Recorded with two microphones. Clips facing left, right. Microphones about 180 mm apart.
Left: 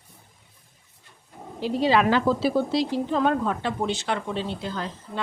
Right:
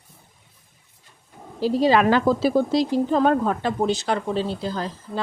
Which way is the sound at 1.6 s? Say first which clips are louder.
Right 3 dB; 40° right (ahead or behind).